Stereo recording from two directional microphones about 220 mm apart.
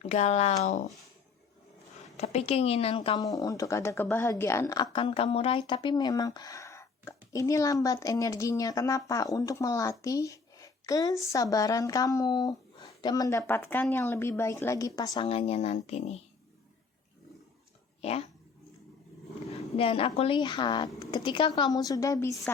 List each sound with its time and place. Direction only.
0.0 s speech: 30° left (ahead or behind)
2.1 s a woman's voice: 30° left (ahead or behind)
18.0 s speech: 30° left (ahead or behind)
19.5 s speech: 25° left (ahead or behind)